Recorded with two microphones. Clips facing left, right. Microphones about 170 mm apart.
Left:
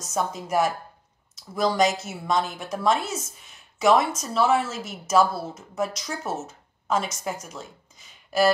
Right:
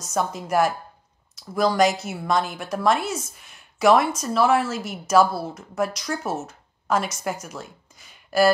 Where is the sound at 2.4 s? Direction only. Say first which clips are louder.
Right 2 dB; 5° right (ahead or behind).